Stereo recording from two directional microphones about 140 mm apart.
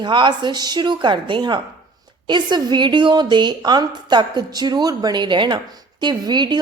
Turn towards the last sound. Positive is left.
turn(degrees=-30)  # may be behind; listen again after turning